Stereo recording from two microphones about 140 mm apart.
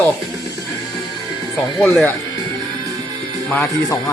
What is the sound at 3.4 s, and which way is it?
Speech, 5° left (ahead or behind).